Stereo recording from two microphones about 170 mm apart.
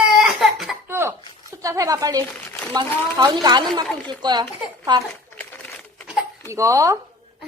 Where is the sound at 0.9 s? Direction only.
15° right (ahead or behind).